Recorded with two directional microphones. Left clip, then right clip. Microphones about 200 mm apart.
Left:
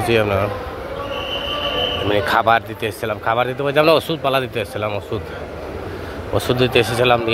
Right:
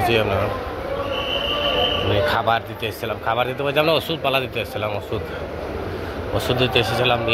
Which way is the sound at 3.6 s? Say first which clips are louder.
Left 5 dB; 45° left (ahead or behind).